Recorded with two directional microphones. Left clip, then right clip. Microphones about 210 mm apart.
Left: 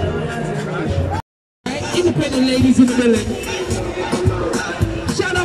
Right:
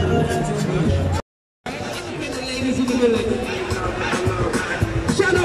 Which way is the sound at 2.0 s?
40° left (ahead or behind).